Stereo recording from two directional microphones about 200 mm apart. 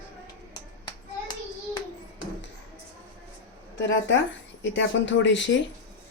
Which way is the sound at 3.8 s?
65° left (ahead or behind).